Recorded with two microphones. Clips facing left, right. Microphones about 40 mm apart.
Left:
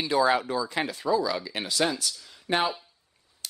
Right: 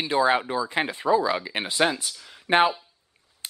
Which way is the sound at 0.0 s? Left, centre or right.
Right.